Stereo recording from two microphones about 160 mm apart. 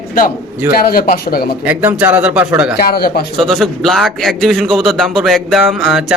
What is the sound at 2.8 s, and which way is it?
Speech, 70° left (ahead or behind).